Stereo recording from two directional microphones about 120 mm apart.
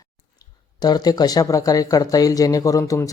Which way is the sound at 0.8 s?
35° left (ahead or behind).